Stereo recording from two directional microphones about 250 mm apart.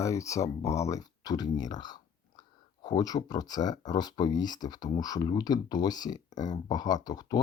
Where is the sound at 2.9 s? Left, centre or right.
Centre.